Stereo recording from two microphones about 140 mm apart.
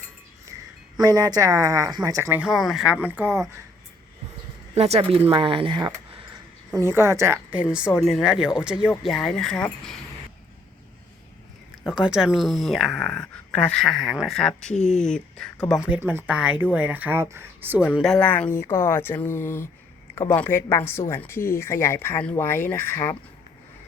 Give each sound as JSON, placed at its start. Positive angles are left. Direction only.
{"t": 0.9, "sound": "a woman's voice", "side_deg": -25}
{"t": 2.3, "sound": "a woman's voice", "side_deg": -5}
{"t": 4.7, "sound": "speech", "side_deg": -50}
{"t": 6.7, "sound": "a woman's voice", "side_deg": -20}
{"t": 11.9, "sound": "speech", "side_deg": -5}
{"t": 15.7, "sound": "a woman's voice", "side_deg": -10}
{"t": 18.0, "sound": "speech", "side_deg": 5}